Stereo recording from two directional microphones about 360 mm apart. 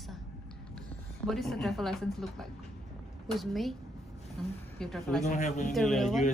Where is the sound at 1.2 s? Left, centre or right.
Centre.